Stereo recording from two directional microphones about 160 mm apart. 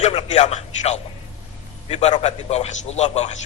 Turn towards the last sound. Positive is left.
turn(degrees=45)  # may be behind; listen again after turning